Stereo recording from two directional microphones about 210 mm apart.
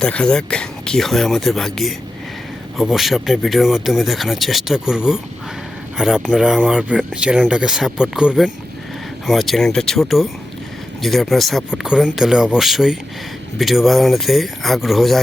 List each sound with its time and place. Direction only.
0.0 s speech: 5° left (ahead or behind)